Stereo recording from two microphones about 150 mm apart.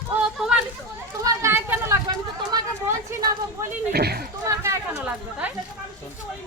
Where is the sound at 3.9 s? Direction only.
90° right.